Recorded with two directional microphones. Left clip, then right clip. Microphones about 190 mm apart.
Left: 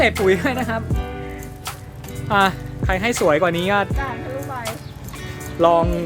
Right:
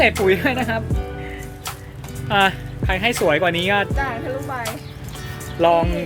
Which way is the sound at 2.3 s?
15° left (ahead or behind).